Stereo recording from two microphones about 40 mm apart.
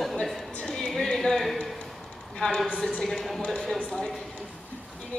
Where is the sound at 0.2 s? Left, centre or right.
Centre.